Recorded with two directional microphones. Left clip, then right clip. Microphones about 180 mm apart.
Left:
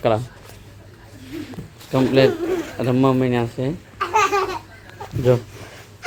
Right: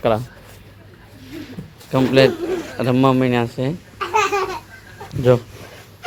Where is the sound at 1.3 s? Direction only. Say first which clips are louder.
Left 2 dB; 5° right (ahead or behind).